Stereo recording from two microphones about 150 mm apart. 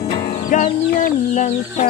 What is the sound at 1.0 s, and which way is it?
Chicken, 55° left (ahead or behind).